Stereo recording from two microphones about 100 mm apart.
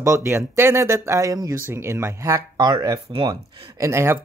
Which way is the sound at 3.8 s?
25° right (ahead or behind).